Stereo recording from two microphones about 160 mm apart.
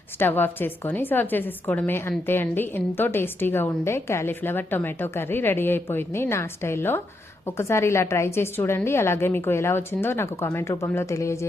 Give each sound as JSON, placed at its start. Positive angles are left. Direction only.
{"t": 0.2, "sound": "a woman's voice", "side_deg": 10}